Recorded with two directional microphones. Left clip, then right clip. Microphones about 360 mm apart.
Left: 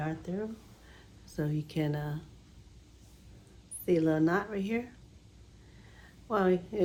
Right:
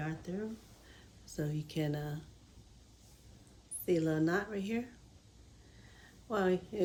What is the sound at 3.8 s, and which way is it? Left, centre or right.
Speech, centre.